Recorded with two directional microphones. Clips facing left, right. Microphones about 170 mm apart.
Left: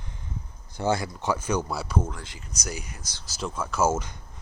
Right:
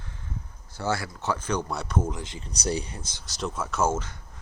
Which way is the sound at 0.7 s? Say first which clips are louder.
Left 3 dB; 20° left (ahead or behind).